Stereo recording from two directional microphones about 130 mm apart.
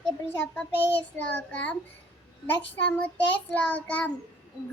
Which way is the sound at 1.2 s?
10° left (ahead or behind).